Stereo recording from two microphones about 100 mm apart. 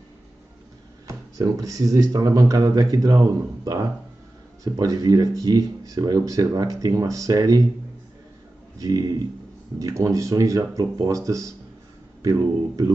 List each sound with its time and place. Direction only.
1.0 s speech: 35° right (ahead or behind)
8.7 s a man's voice: 35° right (ahead or behind)